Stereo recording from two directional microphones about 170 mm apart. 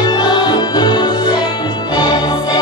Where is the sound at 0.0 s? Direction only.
25° left (ahead or behind).